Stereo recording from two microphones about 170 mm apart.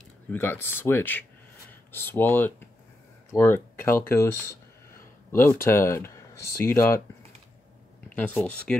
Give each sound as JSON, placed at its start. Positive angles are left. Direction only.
{"t": 0.3, "sound": "speech", "side_deg": 15}
{"t": 8.2, "sound": "speech", "side_deg": 10}